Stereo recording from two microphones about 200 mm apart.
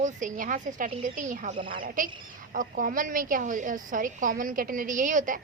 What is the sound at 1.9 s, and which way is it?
A woman's voice, 45° right (ahead or behind).